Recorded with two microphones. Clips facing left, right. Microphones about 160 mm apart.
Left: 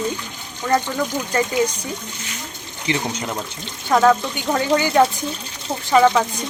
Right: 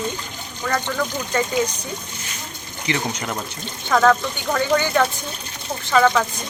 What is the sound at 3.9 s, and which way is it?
Speech, 15° left (ahead or behind).